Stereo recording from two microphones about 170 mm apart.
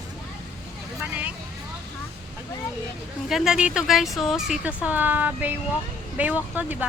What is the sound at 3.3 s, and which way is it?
Speech, 5° right (ahead or behind).